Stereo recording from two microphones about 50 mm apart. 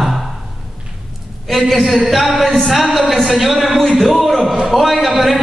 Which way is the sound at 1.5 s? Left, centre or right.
Centre.